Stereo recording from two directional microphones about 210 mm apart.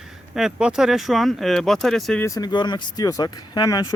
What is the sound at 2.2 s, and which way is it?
Speech, 15° left (ahead or behind).